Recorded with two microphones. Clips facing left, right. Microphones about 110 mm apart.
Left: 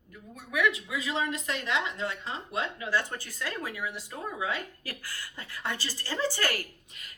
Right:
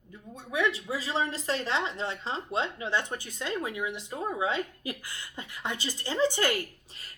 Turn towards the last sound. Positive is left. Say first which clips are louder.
# even
turn(degrees=-35)  # may be behind; listen again after turning